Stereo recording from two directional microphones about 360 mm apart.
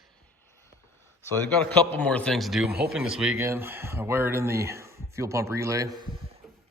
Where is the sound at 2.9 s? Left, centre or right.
Centre.